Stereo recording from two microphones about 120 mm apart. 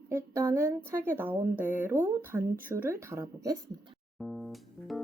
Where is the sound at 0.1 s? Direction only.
20° right (ahead or behind).